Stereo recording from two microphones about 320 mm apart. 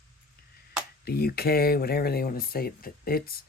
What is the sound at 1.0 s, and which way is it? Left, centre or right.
Speech, left.